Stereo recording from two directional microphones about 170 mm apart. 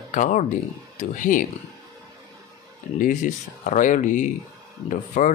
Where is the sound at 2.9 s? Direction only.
50° left (ahead or behind).